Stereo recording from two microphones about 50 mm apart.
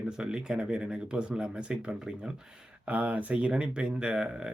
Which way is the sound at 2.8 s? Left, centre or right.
Right.